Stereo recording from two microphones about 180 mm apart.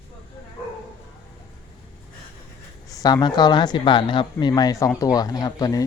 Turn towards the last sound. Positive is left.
turn(degrees=20)  # may be behind; listen again after turning